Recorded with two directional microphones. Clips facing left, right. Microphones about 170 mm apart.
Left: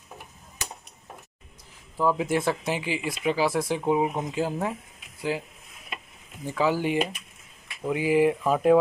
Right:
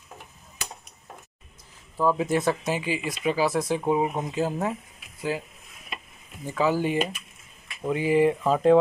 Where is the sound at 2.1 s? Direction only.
10° left (ahead or behind).